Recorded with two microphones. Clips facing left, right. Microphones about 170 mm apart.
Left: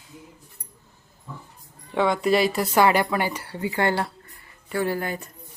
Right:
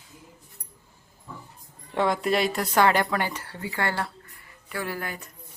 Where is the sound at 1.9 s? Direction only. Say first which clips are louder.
Left 3 dB; centre (ahead or behind).